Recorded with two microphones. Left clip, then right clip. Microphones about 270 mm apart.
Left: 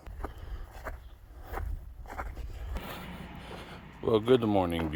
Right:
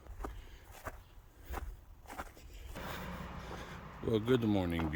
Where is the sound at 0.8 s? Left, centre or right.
Left.